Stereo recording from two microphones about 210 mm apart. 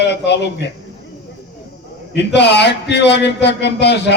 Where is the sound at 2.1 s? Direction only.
55° left (ahead or behind).